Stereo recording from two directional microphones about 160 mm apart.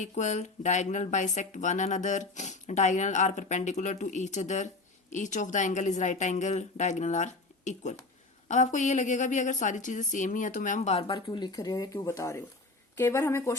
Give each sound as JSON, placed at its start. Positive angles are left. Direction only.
{"t": 0.0, "sound": "speech", "side_deg": 50}